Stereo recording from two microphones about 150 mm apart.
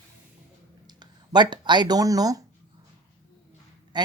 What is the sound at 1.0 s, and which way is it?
Speech, 30° right (ahead or behind).